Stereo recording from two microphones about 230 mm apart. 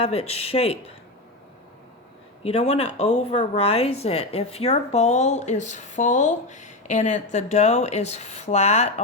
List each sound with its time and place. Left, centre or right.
0.0 s a woman's voice: left
2.4 s a woman's voice: left